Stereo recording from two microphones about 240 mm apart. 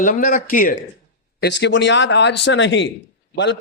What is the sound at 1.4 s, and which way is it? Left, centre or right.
Speech, left.